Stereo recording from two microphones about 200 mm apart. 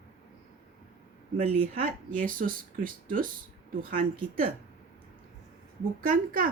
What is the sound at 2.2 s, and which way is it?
Speech, 45° right (ahead or behind).